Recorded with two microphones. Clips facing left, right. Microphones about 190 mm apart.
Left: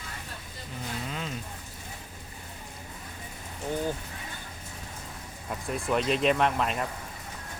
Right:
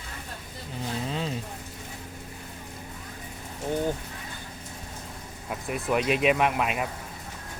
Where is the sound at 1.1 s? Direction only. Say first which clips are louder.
Right 5 dB; 30° right (ahead or behind).